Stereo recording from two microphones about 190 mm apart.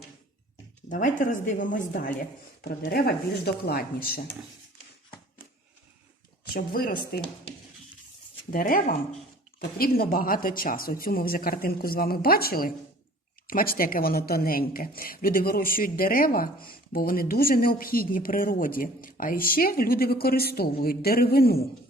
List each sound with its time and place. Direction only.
0.9 s speech: 45° left (ahead or behind)
2.6 s speech: 60° left (ahead or behind)
6.5 s speech: 50° left (ahead or behind)
8.4 s speech: 45° left (ahead or behind)